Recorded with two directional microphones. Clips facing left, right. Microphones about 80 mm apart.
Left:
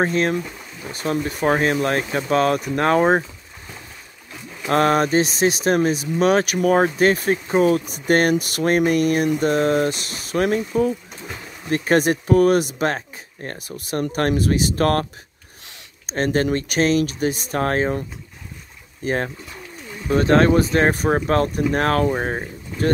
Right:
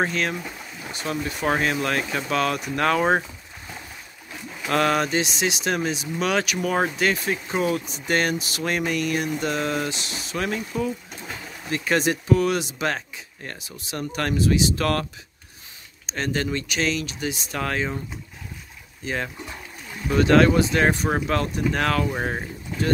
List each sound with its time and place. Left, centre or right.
0.0 s speech: left
4.6 s speech: left
16.1 s speech: left
19.0 s speech: left
22.1 s speech: left